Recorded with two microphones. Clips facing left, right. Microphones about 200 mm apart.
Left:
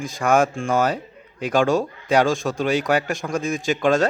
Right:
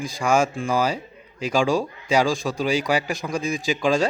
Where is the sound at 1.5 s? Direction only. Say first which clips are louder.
Left 2 dB; centre (ahead or behind).